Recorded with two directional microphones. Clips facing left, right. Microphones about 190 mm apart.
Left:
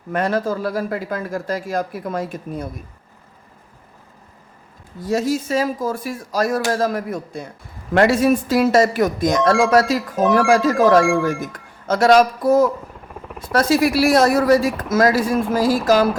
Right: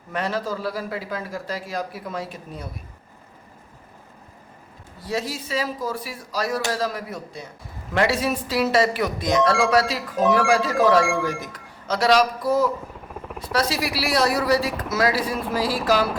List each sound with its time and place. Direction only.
0.1 s speech: 50° left (ahead or behind)
4.9 s speech: 45° left (ahead or behind)
10.2 s speech: centre (ahead or behind)
11.5 s speech: 50° left (ahead or behind)
13.1 s vehicle: centre (ahead or behind)
13.5 s speech: 50° left (ahead or behind)